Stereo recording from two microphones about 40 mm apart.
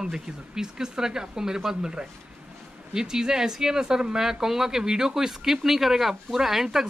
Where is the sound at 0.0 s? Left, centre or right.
Centre.